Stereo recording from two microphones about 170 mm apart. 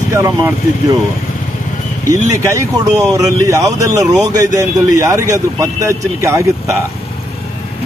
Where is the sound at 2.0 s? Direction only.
20° right (ahead or behind).